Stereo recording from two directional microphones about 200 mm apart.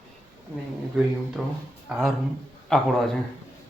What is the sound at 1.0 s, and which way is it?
Speech, centre (ahead or behind).